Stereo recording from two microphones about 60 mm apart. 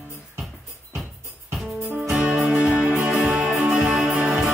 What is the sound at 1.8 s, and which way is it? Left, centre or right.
Music, right.